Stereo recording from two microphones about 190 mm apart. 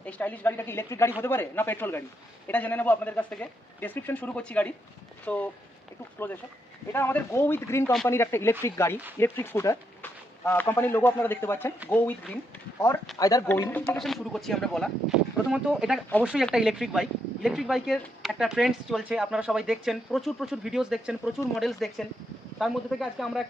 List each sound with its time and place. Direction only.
0.0 s a man's voice: 10° left (ahead or behind)
6.9 s a man's voice: 10° left (ahead or behind)
13.1 s speech: 20° left (ahead or behind); by 23.4 s centre (ahead or behind)